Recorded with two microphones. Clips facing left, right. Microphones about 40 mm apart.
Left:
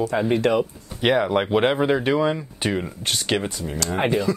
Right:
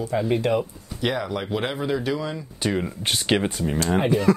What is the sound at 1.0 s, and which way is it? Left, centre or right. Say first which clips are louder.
Speech: left 6 dB; left.